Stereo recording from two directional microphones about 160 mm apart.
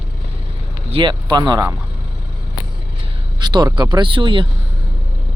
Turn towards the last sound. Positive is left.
turn(degrees=-30)  # may be behind; listen again after turning